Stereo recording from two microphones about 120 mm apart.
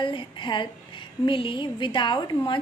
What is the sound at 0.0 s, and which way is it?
A woman's voice, 45° left (ahead or behind).